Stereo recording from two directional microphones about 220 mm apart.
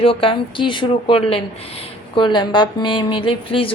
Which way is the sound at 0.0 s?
25° left (ahead or behind).